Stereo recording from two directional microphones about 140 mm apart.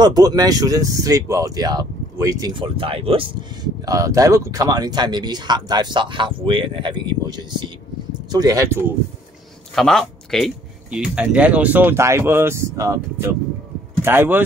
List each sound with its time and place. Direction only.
0.0 s speech: 30° right (ahead or behind)
2.5 s speech: 40° right (ahead or behind)
3.8 s speech: 25° right (ahead or behind)
9.8 s speech: 5° left (ahead or behind); by 14.4 s 15° right (ahead or behind)